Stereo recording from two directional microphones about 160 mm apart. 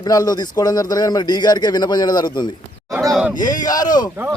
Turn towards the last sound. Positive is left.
turn(degrees=25)  # may be behind; listen again after turning